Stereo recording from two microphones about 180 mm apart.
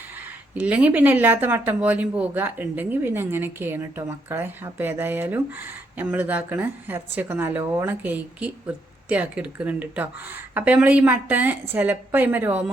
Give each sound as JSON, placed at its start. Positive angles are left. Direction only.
{"t": 0.5, "sound": "speech", "side_deg": -10}